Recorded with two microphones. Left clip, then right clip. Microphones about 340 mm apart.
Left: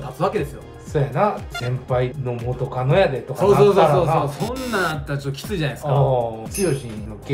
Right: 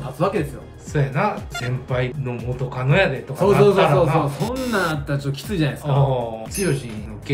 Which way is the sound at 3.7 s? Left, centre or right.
Centre.